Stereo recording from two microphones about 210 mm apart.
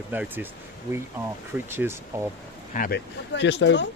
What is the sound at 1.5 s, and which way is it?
Speech, 10° right (ahead or behind).